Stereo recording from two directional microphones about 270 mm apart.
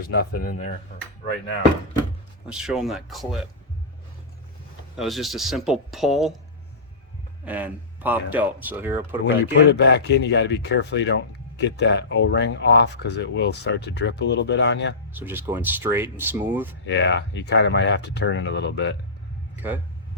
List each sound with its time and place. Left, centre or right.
0.0 s speech: left
2.5 s speech: centre
4.9 s speech: centre
7.4 s speech: centre
9.2 s speech: left
15.1 s speech: centre
16.8 s speech: left
19.5 s a man's voice: centre